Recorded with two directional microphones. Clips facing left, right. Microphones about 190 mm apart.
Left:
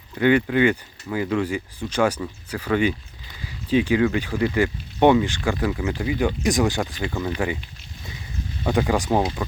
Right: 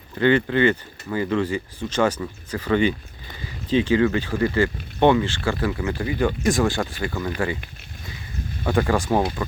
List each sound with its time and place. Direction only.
0.2 s speech: 10° left (ahead or behind)
8.6 s speech: 15° left (ahead or behind)